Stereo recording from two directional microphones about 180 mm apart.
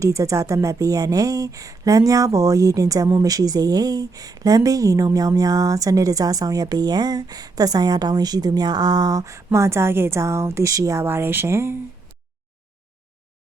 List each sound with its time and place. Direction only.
0.0 s speech: 15° right (ahead or behind)